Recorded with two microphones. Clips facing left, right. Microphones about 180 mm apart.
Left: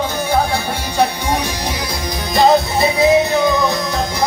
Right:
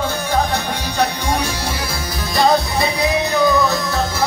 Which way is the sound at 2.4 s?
20° left (ahead or behind).